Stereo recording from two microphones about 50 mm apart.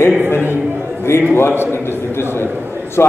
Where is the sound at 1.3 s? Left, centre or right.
Left.